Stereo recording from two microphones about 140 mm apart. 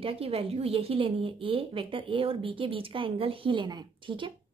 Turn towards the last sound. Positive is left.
turn(degrees=-35)  # may be behind; listen again after turning